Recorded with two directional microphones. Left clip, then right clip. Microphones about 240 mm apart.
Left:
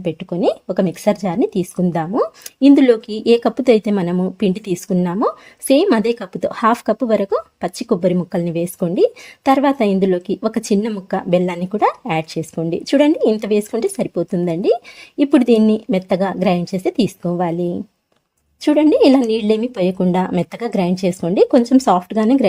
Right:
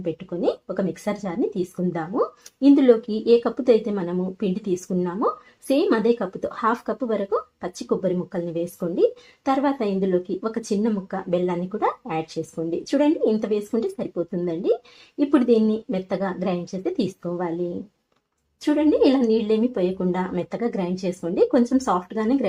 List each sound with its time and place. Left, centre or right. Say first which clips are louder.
0.0 s a woman's voice: left 6 dB; left
18.6 s a woman's voice: left 7 dB; left